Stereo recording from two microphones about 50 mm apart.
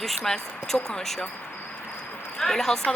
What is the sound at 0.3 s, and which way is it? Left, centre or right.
Speech, centre.